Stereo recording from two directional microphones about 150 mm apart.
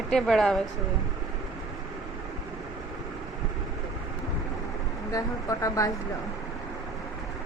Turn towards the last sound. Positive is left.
turn(degrees=25)  # may be behind; listen again after turning